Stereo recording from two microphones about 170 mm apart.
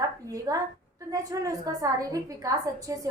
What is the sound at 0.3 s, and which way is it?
A woman's voice, 20° right (ahead or behind).